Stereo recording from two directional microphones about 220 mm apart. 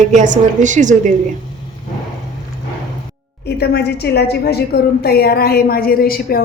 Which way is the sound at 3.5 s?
50° left (ahead or behind).